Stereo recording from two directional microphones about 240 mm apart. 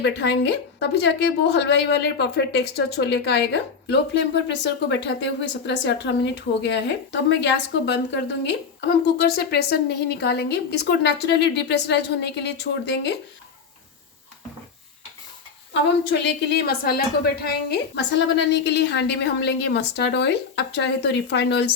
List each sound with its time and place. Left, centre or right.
0.0 s a woman's voice: left
16.6 s a woman's voice: left